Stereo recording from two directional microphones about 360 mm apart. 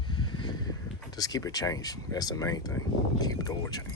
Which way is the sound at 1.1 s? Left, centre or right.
Centre.